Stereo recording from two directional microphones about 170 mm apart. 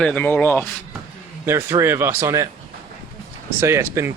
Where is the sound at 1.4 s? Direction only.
15° right (ahead or behind).